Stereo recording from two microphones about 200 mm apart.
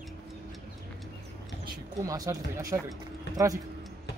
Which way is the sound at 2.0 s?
15° right (ahead or behind).